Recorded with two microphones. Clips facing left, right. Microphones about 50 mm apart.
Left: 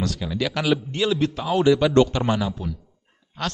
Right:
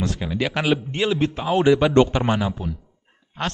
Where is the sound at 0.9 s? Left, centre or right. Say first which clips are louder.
Right 1 dB; centre.